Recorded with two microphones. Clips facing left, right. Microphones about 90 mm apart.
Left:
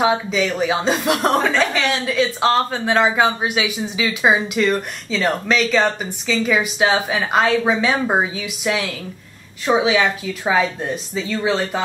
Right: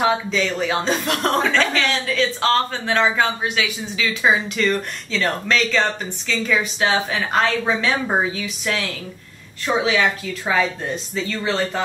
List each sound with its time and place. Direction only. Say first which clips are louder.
0.0 s speech: left 2 dB; 10° left (ahead or behind)